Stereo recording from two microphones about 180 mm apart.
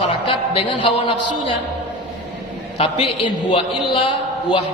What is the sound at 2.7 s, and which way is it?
A man's voice, 30° left (ahead or behind).